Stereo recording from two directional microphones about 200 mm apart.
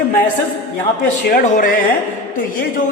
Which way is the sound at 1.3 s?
40° left (ahead or behind).